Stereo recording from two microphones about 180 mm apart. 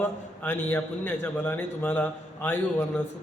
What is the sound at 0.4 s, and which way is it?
A man's voice, 10° left (ahead or behind).